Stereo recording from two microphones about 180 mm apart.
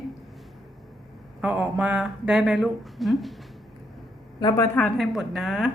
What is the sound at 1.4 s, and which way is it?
Speech, 5° right (ahead or behind).